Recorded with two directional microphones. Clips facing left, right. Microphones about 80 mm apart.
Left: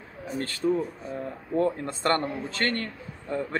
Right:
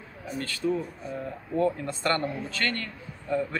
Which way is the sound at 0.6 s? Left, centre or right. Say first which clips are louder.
Left 2 dB; left.